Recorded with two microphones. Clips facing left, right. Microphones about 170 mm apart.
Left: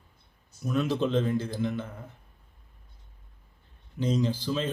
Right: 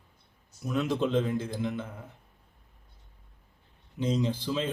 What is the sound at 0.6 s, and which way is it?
Speech, 15° right (ahead or behind).